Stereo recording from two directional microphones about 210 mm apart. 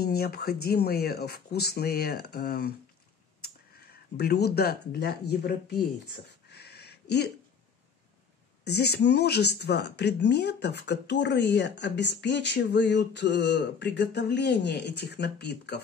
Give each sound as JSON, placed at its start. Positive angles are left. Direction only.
{"t": 0.0, "sound": "speech", "side_deg": 45}
{"t": 4.2, "sound": "speech", "side_deg": 50}
{"t": 6.5, "sound": "a sound", "side_deg": 50}
{"t": 8.6, "sound": "speech", "side_deg": 50}